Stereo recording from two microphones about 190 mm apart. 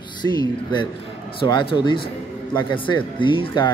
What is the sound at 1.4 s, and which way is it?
Speech, 25° left (ahead or behind).